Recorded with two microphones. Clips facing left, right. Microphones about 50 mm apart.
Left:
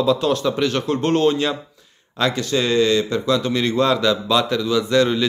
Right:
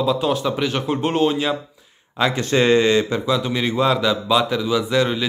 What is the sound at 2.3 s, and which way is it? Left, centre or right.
Speech, right.